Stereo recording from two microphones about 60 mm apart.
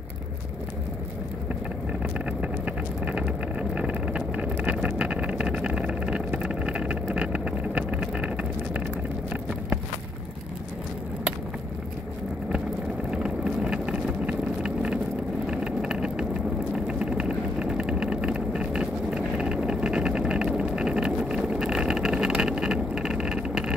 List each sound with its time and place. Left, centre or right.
2.4 s vehicle: right
13.1 s vehicle: centre